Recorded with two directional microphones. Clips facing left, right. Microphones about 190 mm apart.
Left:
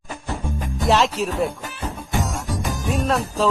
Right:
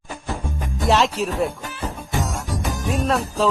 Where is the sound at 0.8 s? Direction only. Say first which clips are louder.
Even; centre (ahead or behind).